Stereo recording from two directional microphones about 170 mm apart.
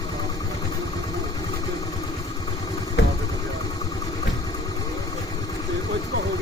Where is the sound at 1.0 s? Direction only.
25° left (ahead or behind).